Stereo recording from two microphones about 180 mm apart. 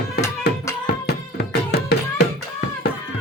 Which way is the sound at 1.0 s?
65° left (ahead or behind).